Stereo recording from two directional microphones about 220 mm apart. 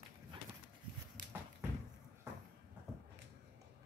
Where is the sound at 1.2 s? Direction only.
40° right (ahead or behind).